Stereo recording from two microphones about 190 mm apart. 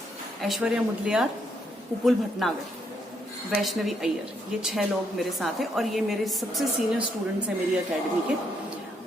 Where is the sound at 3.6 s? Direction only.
Centre (ahead or behind).